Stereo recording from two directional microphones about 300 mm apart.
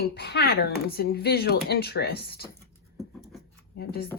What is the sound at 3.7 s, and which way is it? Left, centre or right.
Speech, left.